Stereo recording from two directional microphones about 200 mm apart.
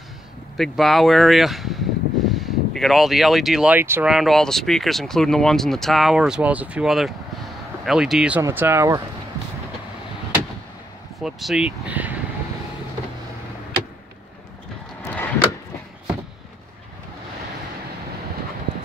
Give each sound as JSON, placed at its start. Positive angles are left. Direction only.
{"t": 0.6, "sound": "speech", "side_deg": 0}
{"t": 11.1, "sound": "speech", "side_deg": 0}